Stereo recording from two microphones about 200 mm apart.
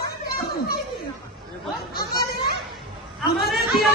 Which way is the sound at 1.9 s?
50° left (ahead or behind).